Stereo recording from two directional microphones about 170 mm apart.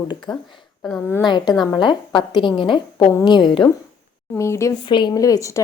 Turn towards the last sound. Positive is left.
turn(degrees=20)  # may be behind; listen again after turning